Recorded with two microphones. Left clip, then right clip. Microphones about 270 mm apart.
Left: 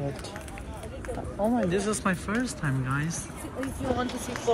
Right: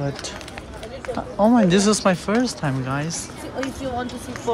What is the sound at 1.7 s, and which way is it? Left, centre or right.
Speech, centre.